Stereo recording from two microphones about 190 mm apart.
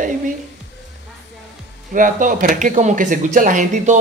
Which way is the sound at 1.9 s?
45° right (ahead or behind).